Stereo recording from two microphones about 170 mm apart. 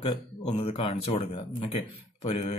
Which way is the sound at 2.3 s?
40° left (ahead or behind).